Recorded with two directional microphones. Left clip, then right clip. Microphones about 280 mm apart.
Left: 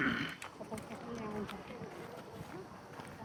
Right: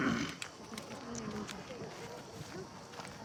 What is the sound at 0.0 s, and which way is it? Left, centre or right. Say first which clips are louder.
Pig: even; centre.